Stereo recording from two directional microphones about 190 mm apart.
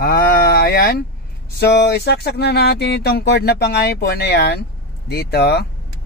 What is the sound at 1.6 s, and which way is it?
Speech, 60° left (ahead or behind).